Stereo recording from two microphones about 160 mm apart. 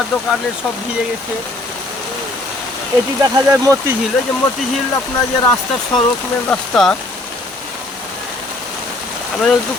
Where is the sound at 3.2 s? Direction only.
20° right (ahead or behind).